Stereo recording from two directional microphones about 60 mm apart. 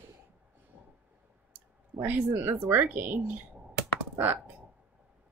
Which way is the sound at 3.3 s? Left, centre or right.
Right.